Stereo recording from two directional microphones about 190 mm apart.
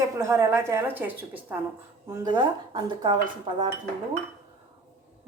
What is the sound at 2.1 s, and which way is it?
Speech, 20° right (ahead or behind).